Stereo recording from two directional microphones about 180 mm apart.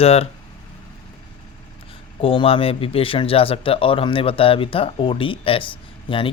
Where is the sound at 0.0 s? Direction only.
35° left (ahead or behind).